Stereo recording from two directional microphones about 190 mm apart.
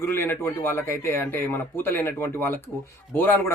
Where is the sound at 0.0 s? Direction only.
15° left (ahead or behind).